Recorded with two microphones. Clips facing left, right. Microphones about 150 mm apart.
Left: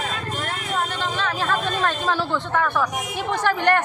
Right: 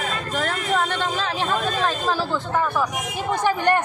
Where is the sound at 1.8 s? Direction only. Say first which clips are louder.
Even; 5° right (ahead or behind).